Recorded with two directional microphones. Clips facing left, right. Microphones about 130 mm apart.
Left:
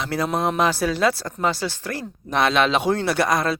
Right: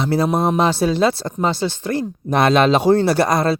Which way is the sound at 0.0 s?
30° right (ahead or behind).